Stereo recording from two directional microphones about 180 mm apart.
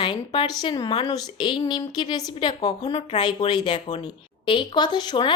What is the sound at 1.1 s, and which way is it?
A woman's voice, 25° left (ahead or behind).